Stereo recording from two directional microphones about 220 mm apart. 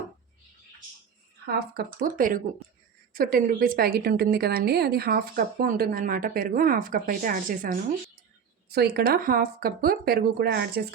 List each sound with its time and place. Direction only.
1.5 s a woman's voice: 45° right (ahead or behind)